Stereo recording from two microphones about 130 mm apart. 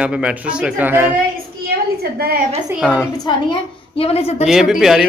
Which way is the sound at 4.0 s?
50° left (ahead or behind).